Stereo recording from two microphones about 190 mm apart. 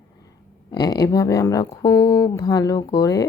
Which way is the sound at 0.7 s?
20° left (ahead or behind).